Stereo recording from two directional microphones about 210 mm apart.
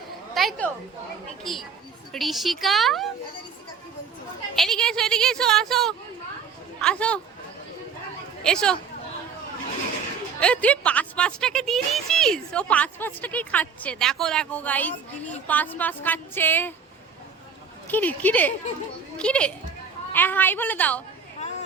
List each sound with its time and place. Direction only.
0.3 s a woman's voice: 5° left (ahead or behind)
4.5 s speech: centre (ahead or behind)
8.4 s speech: 5° left (ahead or behind)
10.4 s speech: 5° left (ahead or behind)
17.8 s speech: 10° left (ahead or behind)
21.4 s vehicle: 35° left (ahead or behind)